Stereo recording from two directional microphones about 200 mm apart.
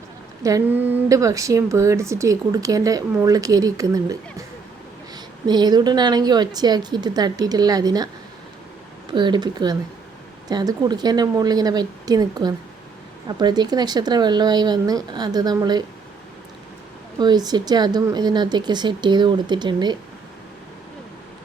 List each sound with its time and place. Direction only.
0.4 s a woman's voice: 15° right (ahead or behind)
9.1 s a woman's voice: 20° right (ahead or behind)
17.2 s a woman's voice: 20° right (ahead or behind)